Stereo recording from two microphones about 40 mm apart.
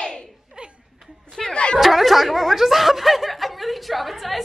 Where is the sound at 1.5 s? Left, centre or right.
Left.